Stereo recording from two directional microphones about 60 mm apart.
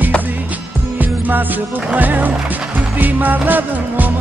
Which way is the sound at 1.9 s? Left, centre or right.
Right.